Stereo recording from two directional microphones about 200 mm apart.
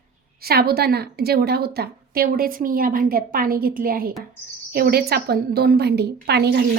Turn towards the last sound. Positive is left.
turn(degrees=-55)  # may be behind; listen again after turning